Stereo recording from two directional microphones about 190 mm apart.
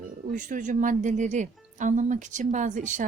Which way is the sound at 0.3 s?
45° right (ahead or behind).